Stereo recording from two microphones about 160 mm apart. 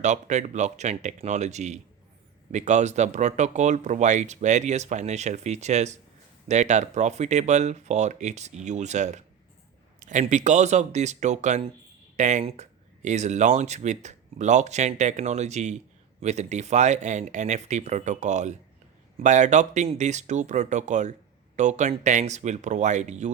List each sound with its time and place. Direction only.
0.0 s speech: 50° right (ahead or behind)